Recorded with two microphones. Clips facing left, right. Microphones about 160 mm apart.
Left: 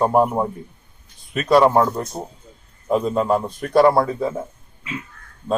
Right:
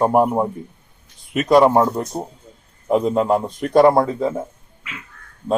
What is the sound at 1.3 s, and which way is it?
A man's voice, 10° right (ahead or behind).